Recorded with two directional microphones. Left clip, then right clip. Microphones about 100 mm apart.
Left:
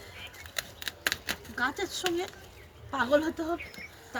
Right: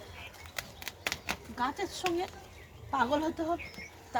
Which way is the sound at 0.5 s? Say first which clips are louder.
Left 5 dB; 5° left (ahead or behind).